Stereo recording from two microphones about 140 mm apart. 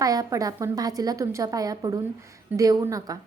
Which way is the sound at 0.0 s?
25° right (ahead or behind).